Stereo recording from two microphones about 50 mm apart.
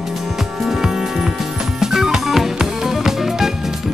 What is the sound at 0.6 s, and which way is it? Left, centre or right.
Music, centre.